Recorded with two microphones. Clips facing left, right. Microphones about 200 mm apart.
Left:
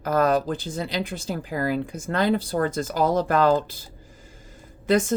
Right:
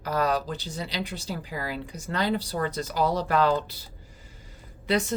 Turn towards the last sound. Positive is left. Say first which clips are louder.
# left 5 dB
turn(degrees=45)  # may be behind; listen again after turning